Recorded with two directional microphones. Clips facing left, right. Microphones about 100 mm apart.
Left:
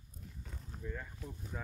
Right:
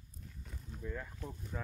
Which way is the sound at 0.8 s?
Centre (ahead or behind).